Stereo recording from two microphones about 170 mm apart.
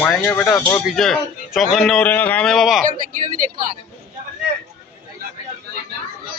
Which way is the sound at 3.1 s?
50° right (ahead or behind).